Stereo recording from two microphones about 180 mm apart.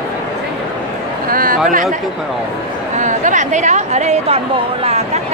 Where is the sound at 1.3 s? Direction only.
50° right (ahead or behind).